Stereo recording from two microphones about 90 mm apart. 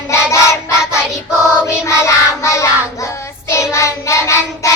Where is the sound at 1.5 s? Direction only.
30° left (ahead or behind).